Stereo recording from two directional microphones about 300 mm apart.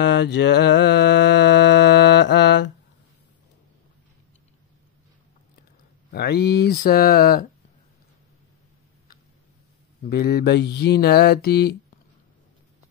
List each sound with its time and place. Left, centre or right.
0.0 s mantra: left
6.1 s speech: left
10.0 s speech: left